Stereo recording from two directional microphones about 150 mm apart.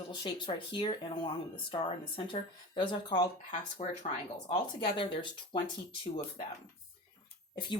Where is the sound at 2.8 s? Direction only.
35° left (ahead or behind).